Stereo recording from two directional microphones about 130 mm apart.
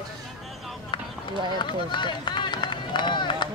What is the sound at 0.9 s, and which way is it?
Speech, 35° left (ahead or behind).